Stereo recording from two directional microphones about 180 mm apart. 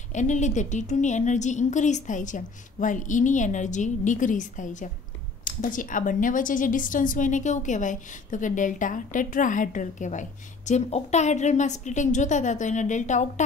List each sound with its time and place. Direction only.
0.1 s a woman's voice: 40° left (ahead or behind)